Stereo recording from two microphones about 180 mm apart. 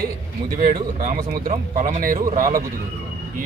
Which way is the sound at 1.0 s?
45° right (ahead or behind).